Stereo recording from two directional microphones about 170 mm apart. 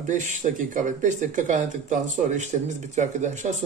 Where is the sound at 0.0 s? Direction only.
45° right (ahead or behind).